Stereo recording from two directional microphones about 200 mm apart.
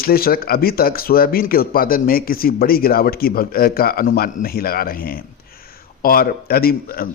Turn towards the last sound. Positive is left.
turn(degrees=50)  # may be behind; listen again after turning